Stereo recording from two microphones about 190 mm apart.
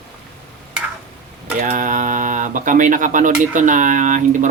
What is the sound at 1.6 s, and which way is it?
Speech, 45° right (ahead or behind).